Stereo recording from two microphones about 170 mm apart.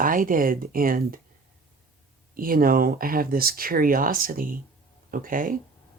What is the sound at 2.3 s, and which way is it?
Speech, 60° right (ahead or behind).